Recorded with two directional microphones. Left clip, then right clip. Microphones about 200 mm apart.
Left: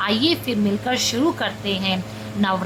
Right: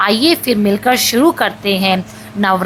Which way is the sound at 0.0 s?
25° right (ahead or behind).